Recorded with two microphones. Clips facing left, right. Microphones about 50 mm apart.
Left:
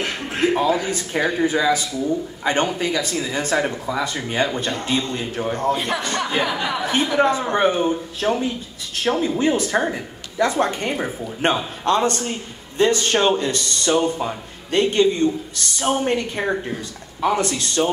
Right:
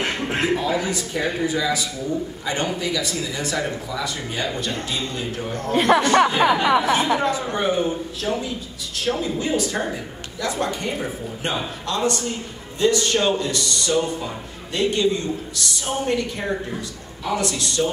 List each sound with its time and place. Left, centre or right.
0.0 s a sound: right
0.8 s a man's voice: left
5.7 s speech: right
7.2 s a man's voice: left